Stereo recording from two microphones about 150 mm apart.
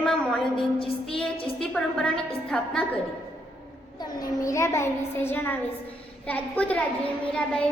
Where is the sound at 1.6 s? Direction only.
5° left (ahead or behind).